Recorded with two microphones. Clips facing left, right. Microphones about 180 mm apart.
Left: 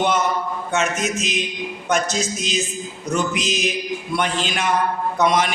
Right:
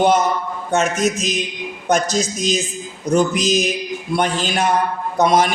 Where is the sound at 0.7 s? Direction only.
35° right (ahead or behind).